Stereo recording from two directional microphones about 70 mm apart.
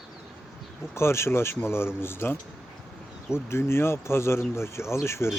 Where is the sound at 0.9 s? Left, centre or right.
Left.